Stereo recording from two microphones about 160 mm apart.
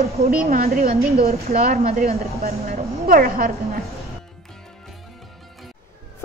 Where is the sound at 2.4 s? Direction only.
65° right (ahead or behind).